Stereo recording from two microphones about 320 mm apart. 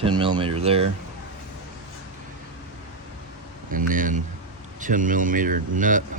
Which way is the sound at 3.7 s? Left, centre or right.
Right.